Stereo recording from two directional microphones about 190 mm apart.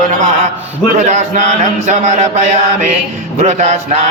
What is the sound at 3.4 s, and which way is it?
Mantra, 40° right (ahead or behind).